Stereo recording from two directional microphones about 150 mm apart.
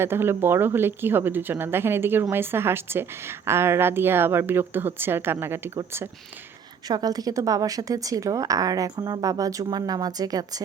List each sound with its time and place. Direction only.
0.0 s a woman's voice: 15° right (ahead or behind)
6.8 s a woman's voice: 25° right (ahead or behind)